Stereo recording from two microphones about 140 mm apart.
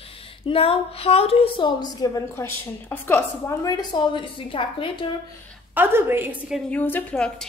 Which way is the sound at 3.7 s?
30° left (ahead or behind).